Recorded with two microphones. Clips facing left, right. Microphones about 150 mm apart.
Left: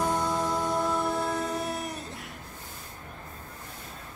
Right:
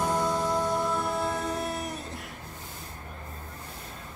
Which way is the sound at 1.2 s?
Centre (ahead or behind).